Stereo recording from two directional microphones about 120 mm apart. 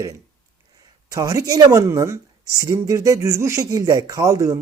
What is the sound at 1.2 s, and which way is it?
Speech, 30° right (ahead or behind).